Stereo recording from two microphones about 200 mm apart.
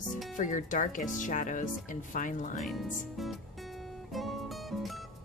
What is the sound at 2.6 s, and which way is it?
Speech, centre (ahead or behind).